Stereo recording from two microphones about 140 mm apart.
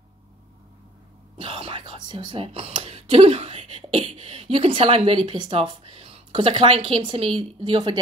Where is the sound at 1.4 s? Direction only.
40° right (ahead or behind).